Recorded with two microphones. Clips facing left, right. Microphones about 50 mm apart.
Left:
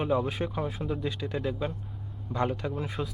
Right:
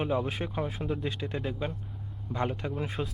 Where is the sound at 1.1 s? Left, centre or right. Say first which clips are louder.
Left 1 dB; centre.